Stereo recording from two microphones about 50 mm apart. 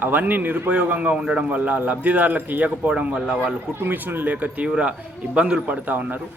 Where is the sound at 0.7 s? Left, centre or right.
Right.